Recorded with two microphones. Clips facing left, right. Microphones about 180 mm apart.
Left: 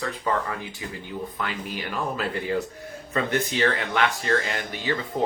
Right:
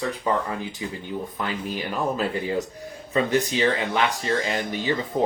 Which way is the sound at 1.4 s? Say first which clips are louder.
Right 3 dB; 20° right (ahead or behind).